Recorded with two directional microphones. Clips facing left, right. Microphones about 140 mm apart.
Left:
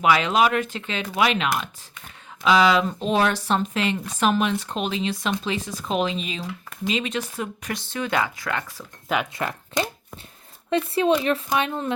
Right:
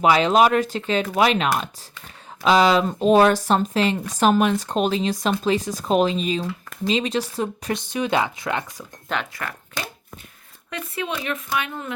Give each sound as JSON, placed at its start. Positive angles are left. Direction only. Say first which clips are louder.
{"t": 0.0, "sound": "speech", "louder": "right 3 dB", "side_deg": -35}
{"t": 7.7, "sound": "speech", "louder": "right 3 dB", "side_deg": -20}
{"t": 9.3, "sound": "speech", "louder": "left 6 dB", "side_deg": 20}